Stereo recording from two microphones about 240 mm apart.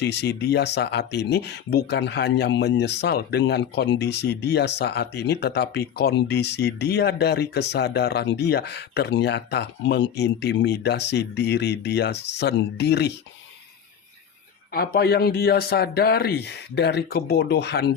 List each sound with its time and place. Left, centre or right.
0.0 s speech: left
14.7 s a man's voice: left